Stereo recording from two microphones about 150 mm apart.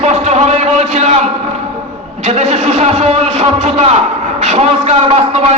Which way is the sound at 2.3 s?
45° right (ahead or behind).